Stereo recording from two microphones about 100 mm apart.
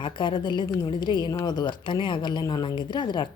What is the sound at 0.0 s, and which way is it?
Speech, 55° left (ahead or behind).